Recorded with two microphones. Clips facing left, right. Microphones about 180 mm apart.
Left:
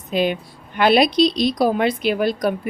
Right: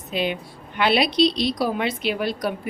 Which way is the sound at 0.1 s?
45° left (ahead or behind).